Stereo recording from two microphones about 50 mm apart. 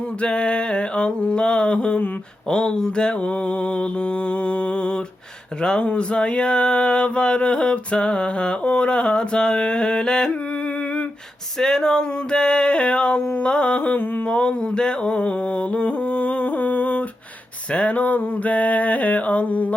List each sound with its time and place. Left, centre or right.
0.2 s mantra: left
11.6 s mantra: centre
14.3 s music: centre
17.7 s a sound: left